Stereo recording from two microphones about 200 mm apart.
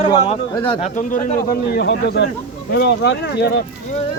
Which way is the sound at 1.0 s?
40° left (ahead or behind).